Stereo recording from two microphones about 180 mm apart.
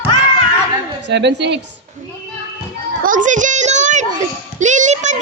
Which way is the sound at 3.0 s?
45° right (ahead or behind).